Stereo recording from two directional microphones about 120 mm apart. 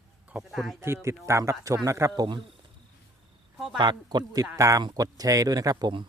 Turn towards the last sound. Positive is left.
turn(degrees=-35)  # may be behind; listen again after turning